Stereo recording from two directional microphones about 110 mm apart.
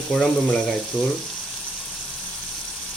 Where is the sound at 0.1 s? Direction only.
5° left (ahead or behind).